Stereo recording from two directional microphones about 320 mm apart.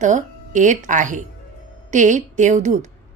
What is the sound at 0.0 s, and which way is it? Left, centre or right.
A woman's voice, right.